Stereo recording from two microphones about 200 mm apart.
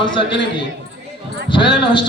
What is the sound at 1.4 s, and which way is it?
Speech, 25° left (ahead or behind).